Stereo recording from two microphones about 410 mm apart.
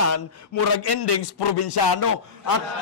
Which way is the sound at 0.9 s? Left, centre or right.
Left.